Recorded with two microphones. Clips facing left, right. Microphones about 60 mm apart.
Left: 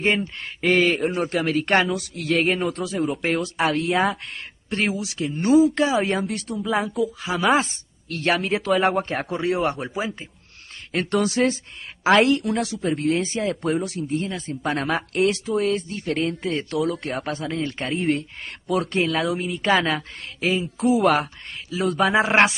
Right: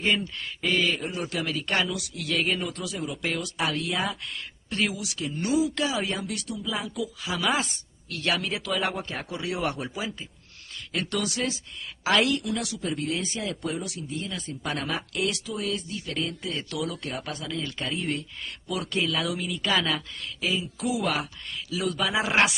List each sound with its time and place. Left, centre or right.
0.0 s a man's voice: left
6.6 s a man's voice: left
7.2 s a man's voice: left
8.7 s a man's voice: left
9.3 s a man's voice: left
21.0 s a man's voice: left
21.6 s a man's voice: left